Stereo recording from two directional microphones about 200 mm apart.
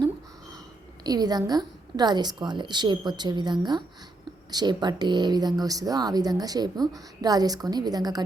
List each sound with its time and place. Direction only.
1.0 s speech: 20° right (ahead or behind)